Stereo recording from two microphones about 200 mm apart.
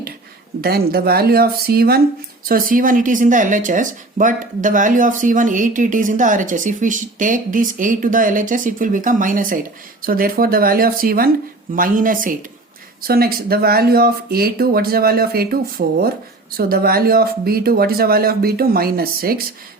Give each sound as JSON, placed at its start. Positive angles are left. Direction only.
{"t": 0.6, "sound": "speech", "side_deg": -50}